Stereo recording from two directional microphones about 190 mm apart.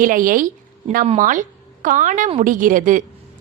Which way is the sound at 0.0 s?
45° right (ahead or behind).